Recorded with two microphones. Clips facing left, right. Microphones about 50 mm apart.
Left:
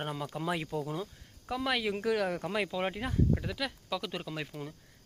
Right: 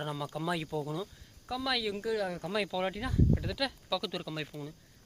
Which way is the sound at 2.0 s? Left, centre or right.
Left.